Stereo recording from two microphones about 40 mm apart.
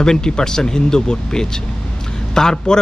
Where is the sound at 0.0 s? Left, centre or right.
Centre.